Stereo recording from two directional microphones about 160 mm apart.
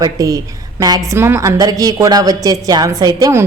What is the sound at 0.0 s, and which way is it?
A woman's voice, 20° right (ahead or behind).